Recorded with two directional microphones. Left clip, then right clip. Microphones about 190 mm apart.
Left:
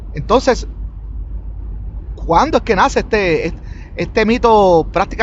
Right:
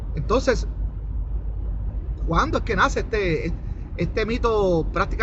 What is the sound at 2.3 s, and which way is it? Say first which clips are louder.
Speech: left 10 dB; 50° left (ahead or behind).